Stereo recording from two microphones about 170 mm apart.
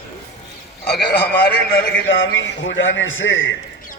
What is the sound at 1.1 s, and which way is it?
A man's voice, 70° left (ahead or behind).